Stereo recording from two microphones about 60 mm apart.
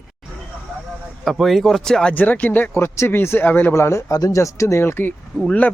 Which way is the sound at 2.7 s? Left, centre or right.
Left.